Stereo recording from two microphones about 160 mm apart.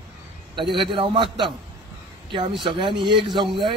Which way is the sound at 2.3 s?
30° right (ahead or behind).